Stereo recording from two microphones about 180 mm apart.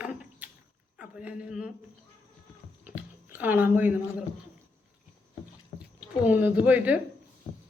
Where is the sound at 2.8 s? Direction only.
10° right (ahead or behind).